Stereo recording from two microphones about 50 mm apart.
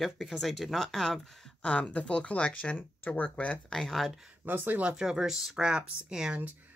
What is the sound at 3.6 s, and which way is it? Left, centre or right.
Speech, centre.